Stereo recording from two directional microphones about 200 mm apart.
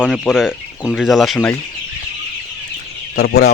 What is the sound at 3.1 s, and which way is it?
Speech, 50° left (ahead or behind).